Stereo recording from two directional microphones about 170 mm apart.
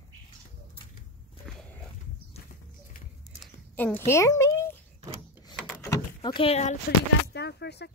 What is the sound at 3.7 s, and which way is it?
Speech, 10° left (ahead or behind).